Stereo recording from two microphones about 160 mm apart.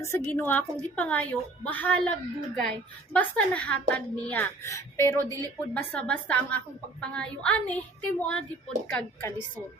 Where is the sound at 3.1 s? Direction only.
5° left (ahead or behind).